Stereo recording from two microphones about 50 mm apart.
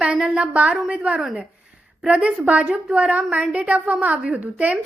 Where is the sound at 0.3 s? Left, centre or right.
Right.